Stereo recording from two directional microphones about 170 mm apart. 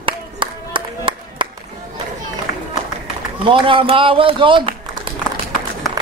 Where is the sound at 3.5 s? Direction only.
30° right (ahead or behind).